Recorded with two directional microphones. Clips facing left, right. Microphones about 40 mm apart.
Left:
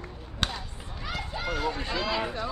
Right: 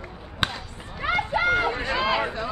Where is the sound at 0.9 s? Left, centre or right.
Right.